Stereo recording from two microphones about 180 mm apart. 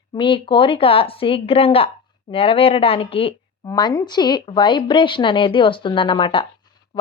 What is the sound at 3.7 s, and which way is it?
Speech, 20° left (ahead or behind).